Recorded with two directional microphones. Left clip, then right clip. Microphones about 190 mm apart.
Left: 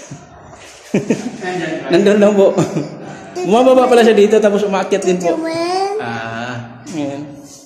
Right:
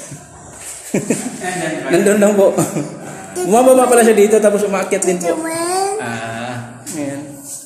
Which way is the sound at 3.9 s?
35° left (ahead or behind).